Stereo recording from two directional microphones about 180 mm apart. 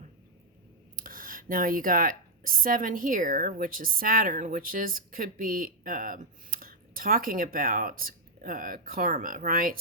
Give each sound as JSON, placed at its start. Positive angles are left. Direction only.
{"t": 0.9, "sound": "speech", "side_deg": -50}